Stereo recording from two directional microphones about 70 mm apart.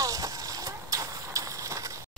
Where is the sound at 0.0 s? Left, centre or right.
Right.